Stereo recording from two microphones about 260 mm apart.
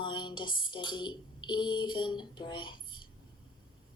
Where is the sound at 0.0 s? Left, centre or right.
Centre.